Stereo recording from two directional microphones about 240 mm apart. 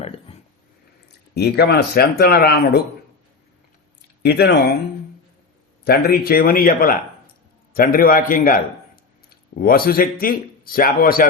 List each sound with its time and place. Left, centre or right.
1.0 s speech: left
4.2 s speech: left
5.8 s speech: left